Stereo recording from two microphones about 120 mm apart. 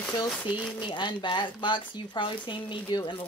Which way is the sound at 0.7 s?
40° left (ahead or behind).